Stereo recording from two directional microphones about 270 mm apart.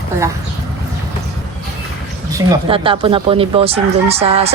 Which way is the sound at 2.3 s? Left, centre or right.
Centre.